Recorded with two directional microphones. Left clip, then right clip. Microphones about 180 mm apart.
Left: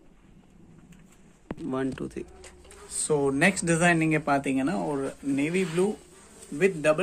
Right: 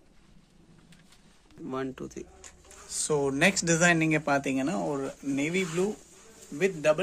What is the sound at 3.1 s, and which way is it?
Speech, 45° right (ahead or behind).